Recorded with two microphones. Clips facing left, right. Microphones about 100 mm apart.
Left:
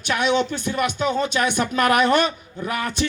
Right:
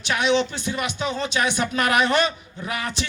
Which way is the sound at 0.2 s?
50° left (ahead or behind).